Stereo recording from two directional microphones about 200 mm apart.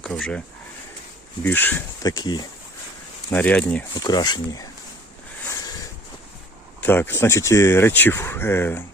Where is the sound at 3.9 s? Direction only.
20° left (ahead or behind).